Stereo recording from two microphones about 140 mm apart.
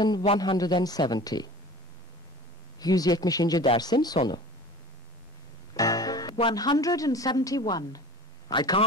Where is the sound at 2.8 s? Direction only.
25° left (ahead or behind).